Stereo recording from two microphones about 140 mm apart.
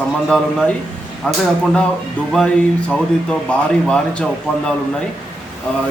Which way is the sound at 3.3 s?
5° left (ahead or behind).